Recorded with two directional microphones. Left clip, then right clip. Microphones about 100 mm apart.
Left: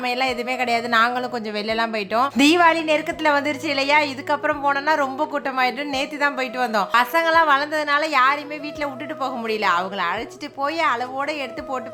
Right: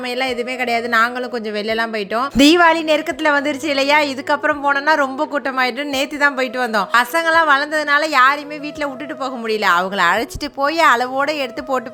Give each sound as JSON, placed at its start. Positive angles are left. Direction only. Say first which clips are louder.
{"t": 0.1, "sound": "speech", "louder": "right 4 dB", "side_deg": -20}
{"t": 2.3, "sound": "a woman's voice", "louder": "right 5 dB", "side_deg": -55}
{"t": 3.2, "sound": "a woman's voice", "louder": "right 3 dB", "side_deg": -45}
{"t": 10.6, "sound": "speech", "louder": "right 7 dB", "side_deg": -75}